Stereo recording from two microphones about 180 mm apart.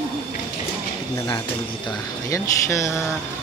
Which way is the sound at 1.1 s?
15° left (ahead or behind).